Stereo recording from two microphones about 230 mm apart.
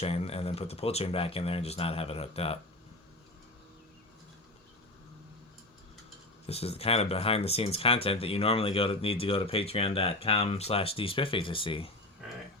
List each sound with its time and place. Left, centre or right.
0.0 s speech: left
6.5 s speech: left